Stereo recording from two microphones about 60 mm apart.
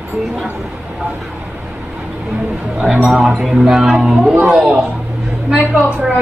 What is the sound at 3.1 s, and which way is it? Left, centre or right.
A woman's voice, centre.